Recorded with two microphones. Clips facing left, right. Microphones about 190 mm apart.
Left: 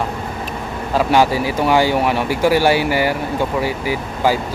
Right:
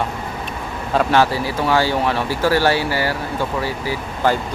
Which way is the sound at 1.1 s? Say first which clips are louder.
Left 4 dB; 15° left (ahead or behind).